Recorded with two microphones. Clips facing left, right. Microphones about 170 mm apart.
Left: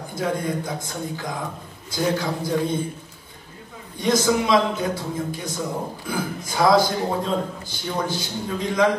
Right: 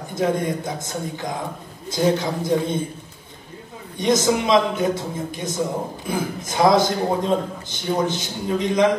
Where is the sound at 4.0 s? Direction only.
20° right (ahead or behind).